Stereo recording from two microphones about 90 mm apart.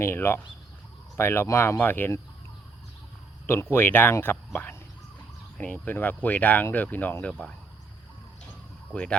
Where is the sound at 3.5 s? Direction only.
30° left (ahead or behind).